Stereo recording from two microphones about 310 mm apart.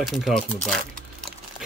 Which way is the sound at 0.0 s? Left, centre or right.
Centre.